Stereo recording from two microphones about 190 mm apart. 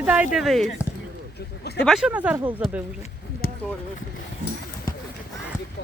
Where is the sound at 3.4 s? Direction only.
50° left (ahead or behind).